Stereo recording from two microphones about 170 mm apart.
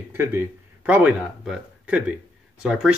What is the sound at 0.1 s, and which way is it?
Speech, 15° right (ahead or behind).